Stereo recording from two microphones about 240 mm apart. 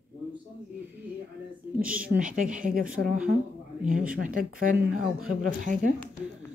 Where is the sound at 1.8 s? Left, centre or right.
Centre.